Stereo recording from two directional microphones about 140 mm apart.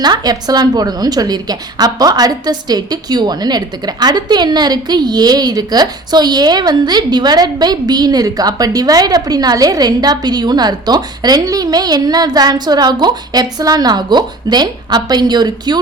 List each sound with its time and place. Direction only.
0.0 s a woman's voice: 30° right (ahead or behind)